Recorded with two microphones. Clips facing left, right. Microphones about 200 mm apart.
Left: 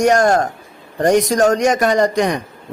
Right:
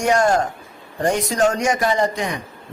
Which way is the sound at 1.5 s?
65° left (ahead or behind).